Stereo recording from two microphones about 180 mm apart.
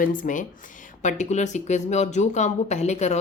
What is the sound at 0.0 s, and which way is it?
Speech, 50° left (ahead or behind).